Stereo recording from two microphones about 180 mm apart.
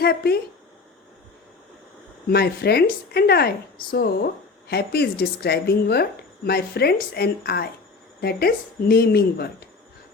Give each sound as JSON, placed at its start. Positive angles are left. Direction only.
{"t": 0.0, "sound": "speech", "side_deg": 60}
{"t": 2.2, "sound": "speech", "side_deg": 60}